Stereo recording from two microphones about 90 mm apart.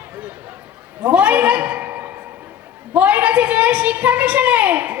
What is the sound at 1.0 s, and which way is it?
A man's voice, 15° right (ahead or behind).